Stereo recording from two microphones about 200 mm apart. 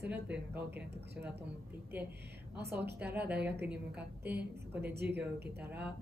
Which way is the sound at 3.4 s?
5° right (ahead or behind).